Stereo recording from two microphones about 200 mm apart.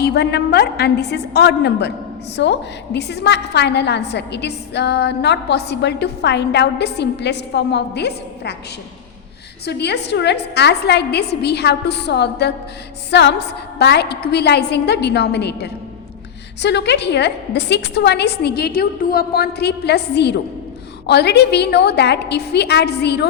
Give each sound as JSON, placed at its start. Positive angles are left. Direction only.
{"t": 0.0, "sound": "a woman's voice", "side_deg": 55}
{"t": 9.6, "sound": "a woman's voice", "side_deg": 55}